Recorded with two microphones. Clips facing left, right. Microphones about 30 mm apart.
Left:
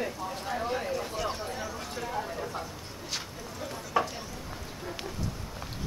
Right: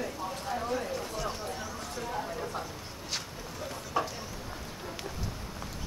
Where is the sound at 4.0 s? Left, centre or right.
Centre.